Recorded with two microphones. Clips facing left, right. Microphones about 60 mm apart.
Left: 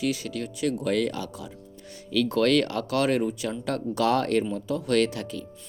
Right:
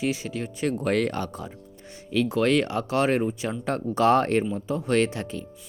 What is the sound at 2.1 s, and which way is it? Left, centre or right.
Speech, right.